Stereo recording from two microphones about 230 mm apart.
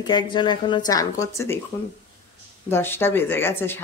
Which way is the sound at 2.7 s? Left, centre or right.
Centre.